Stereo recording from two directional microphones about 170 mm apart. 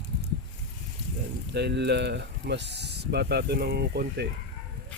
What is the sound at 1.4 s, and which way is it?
Speech, 85° right.